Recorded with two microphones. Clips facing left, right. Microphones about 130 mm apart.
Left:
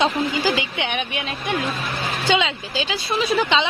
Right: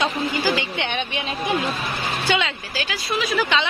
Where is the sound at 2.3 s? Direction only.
20° left (ahead or behind).